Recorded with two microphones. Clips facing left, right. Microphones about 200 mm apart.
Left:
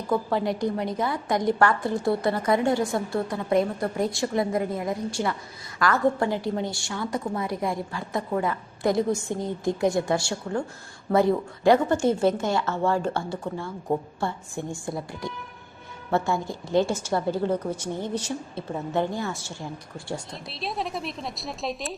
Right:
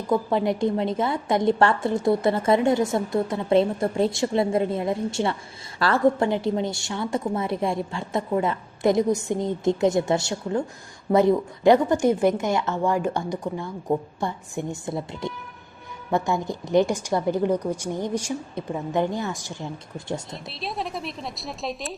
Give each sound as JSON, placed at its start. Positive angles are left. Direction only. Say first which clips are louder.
{"t": 0.1, "sound": "a woman's voice", "louder": "right 3 dB", "side_deg": -20}
{"t": 20.3, "sound": "speech", "louder": "even", "side_deg": 0}